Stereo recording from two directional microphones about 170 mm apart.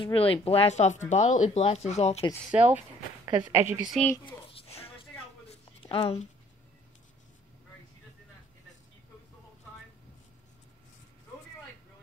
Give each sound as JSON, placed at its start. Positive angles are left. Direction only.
{"t": 0.0, "sound": "speech", "side_deg": 30}
{"t": 2.5, "sound": "speech", "side_deg": -10}
{"t": 4.5, "sound": "a sound", "side_deg": 35}